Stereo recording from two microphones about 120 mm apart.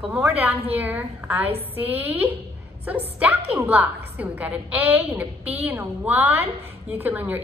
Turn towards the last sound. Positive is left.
turn(degrees=-15)  # may be behind; listen again after turning